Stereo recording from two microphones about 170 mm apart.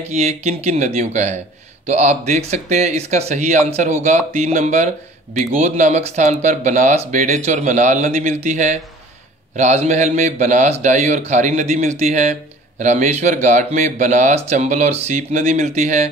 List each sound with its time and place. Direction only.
0.0 s a man's voice: 40° right (ahead or behind)